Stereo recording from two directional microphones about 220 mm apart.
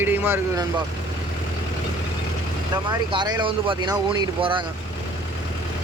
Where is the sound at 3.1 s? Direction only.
20° right (ahead or behind).